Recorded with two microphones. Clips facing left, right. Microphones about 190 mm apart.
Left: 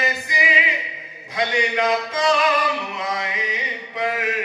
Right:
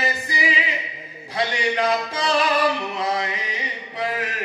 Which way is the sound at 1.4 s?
35° right (ahead or behind).